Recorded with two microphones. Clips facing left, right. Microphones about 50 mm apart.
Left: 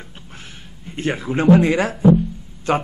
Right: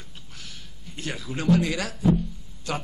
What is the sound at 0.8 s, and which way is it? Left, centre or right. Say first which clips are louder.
A man's voice: left 11 dB; left.